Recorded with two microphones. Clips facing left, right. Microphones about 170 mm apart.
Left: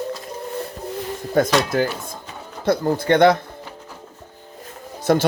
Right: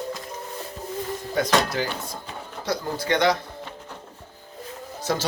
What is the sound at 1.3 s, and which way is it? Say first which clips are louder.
Speech: left 5 dB; 50° left (ahead or behind).